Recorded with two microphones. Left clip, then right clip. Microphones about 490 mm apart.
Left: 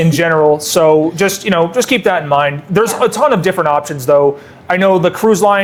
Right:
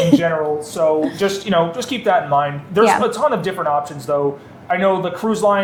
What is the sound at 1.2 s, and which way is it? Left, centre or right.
Speech, left.